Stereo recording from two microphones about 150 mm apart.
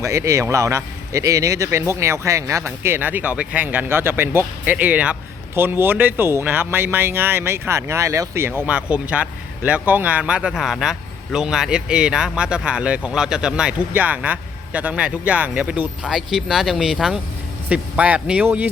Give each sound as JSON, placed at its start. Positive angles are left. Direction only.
{"t": 0.0, "sound": "speech", "side_deg": -20}